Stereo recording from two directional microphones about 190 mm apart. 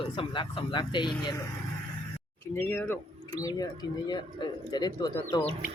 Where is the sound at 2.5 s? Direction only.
10° left (ahead or behind).